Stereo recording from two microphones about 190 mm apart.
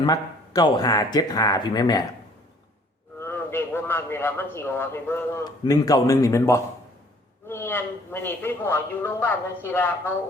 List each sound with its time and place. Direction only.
0.0 s speech: 20° left (ahead or behind)
3.2 s a man's voice: 10° left (ahead or behind)